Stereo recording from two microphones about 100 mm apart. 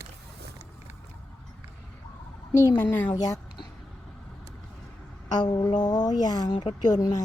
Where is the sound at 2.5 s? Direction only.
30° left (ahead or behind).